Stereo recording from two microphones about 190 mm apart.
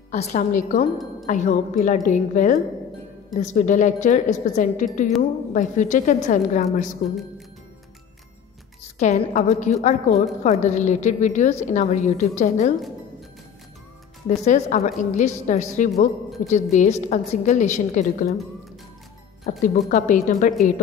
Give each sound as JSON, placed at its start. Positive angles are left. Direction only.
{"t": 0.1, "sound": "a woman's voice", "side_deg": 35}
{"t": 9.0, "sound": "a woman's voice", "side_deg": 35}
{"t": 14.3, "sound": "a woman's voice", "side_deg": 40}
{"t": 19.5, "sound": "a woman's voice", "side_deg": 45}